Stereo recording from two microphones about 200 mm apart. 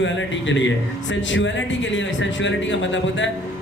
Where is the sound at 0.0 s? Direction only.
70° left (ahead or behind).